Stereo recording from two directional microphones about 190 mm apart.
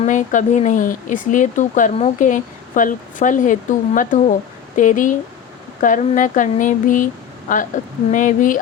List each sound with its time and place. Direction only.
0.0 s speech: 40° left (ahead or behind)